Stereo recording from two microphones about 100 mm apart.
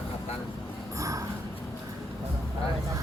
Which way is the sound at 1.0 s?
35° right (ahead or behind).